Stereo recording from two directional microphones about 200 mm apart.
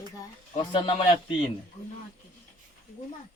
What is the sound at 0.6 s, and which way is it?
Speech, 25° left (ahead or behind).